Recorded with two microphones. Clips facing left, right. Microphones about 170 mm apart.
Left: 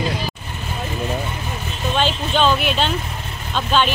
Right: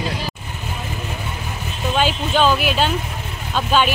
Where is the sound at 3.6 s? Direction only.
10° right (ahead or behind).